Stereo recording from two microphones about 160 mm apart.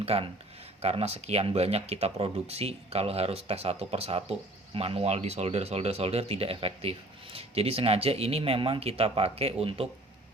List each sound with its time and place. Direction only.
0.0 s speech: 35° right (ahead or behind)